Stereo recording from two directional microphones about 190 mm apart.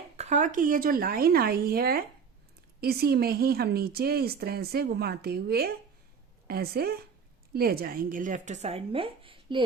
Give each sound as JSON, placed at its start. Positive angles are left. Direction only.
{"t": 0.2, "sound": "speech", "side_deg": -40}